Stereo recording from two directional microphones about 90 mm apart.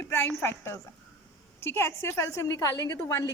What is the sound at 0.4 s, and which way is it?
A woman's voice, 30° left (ahead or behind).